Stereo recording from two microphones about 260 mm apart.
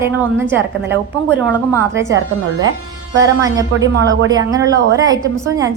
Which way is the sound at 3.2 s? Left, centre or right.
Centre.